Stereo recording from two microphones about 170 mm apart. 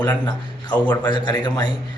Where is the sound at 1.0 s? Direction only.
25° left (ahead or behind).